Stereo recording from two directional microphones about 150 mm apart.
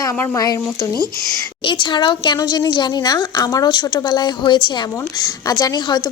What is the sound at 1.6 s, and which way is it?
A woman's voice, 30° left (ahead or behind).